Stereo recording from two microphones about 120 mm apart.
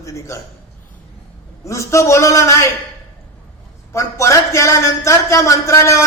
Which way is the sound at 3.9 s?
25° left (ahead or behind).